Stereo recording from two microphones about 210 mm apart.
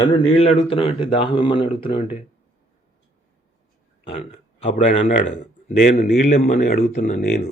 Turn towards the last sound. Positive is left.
turn(degrees=35)  # may be behind; listen again after turning